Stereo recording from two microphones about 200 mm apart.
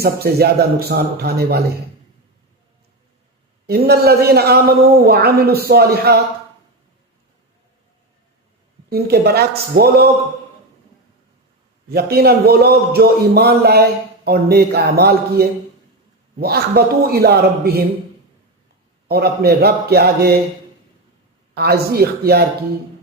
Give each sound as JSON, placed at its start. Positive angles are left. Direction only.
{"t": 0.0, "sound": "a man's voice", "side_deg": -50}
{"t": 3.7, "sound": "a man's voice", "side_deg": -50}
{"t": 8.9, "sound": "a man's voice", "side_deg": -50}
{"t": 11.9, "sound": "a man's voice", "side_deg": -50}
{"t": 19.0, "sound": "a man's voice", "side_deg": -50}
{"t": 21.5, "sound": "a man's voice", "side_deg": -50}